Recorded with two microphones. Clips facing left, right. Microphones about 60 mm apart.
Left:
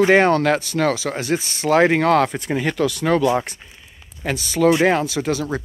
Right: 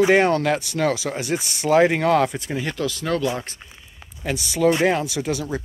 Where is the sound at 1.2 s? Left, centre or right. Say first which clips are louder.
Left 3 dB; centre.